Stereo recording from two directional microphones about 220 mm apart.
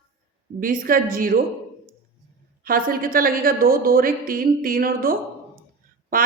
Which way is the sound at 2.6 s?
40° right (ahead or behind).